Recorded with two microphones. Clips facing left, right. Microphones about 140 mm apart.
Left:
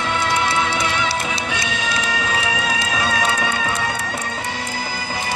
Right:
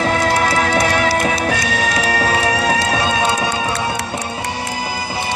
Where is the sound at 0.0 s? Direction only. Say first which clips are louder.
Right 5 dB; 40° right (ahead or behind).